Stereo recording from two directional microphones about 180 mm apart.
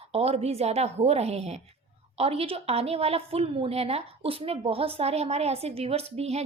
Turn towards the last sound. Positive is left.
turn(degrees=-35)  # may be behind; listen again after turning